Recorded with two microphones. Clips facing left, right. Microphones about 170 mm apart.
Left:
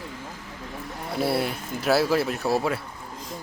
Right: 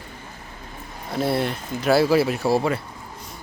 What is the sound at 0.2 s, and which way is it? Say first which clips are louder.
Vehicle: left 3 dB; 90° left.